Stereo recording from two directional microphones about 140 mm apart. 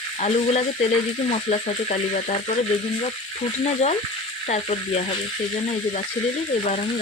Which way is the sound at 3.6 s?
50° left (ahead or behind).